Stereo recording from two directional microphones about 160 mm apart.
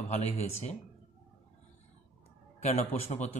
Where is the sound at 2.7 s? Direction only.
45° left (ahead or behind).